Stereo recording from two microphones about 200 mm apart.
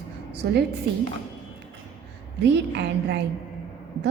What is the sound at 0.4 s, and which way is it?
Speech, 60° right (ahead or behind).